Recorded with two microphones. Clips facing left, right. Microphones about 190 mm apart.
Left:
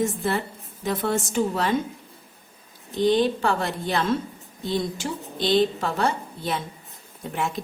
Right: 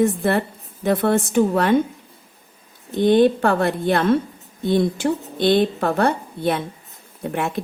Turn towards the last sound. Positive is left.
turn(degrees=-60)  # may be behind; listen again after turning